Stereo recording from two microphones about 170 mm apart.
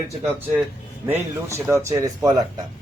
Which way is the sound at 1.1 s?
15° right (ahead or behind).